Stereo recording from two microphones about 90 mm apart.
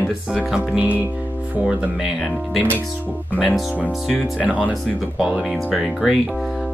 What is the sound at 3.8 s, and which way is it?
Speech, 10° right (ahead or behind).